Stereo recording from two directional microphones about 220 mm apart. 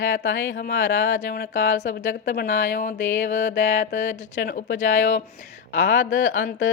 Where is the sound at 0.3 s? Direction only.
55° left (ahead or behind).